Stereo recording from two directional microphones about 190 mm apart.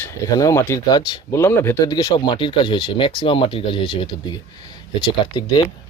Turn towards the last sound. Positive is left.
turn(degrees=20)  # may be behind; listen again after turning